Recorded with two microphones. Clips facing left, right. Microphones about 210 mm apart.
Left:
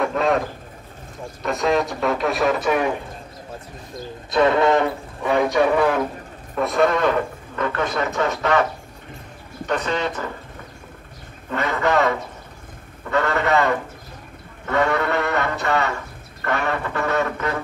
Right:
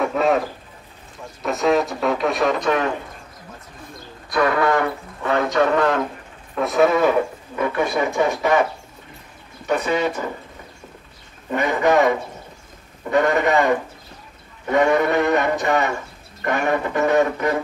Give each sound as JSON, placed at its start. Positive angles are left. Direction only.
{"t": 0.0, "sound": "a sound", "side_deg": -5}
{"t": 1.4, "sound": "a man's voice", "side_deg": 0}
{"t": 4.3, "sound": "speech", "side_deg": 25}
{"t": 6.5, "sound": "a man's voice", "side_deg": 0}
{"t": 9.7, "sound": "a man's voice", "side_deg": -10}
{"t": 11.5, "sound": "a man's voice", "side_deg": -15}